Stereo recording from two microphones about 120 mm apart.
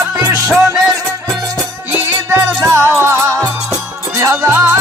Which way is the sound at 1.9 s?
20° right (ahead or behind).